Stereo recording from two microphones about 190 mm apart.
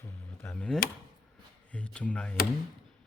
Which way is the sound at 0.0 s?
5° left (ahead or behind).